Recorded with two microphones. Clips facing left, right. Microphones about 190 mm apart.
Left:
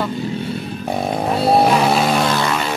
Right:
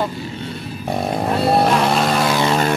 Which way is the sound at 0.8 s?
Centre (ahead or behind).